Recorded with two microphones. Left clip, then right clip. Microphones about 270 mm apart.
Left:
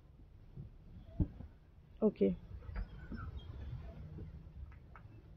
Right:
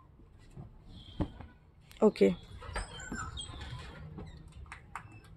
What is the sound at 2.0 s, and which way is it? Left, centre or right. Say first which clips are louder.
Speech: right 8 dB; centre.